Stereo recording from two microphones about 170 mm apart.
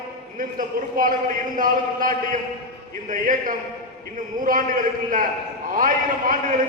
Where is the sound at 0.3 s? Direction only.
55° right (ahead or behind).